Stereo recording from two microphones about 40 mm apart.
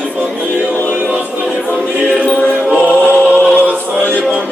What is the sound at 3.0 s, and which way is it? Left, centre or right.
Chant, right.